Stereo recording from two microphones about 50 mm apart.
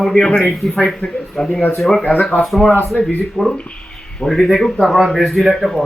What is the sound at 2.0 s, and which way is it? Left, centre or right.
Speech, left.